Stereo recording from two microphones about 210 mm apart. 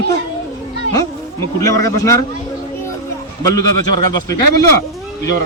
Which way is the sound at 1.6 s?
15° left (ahead or behind).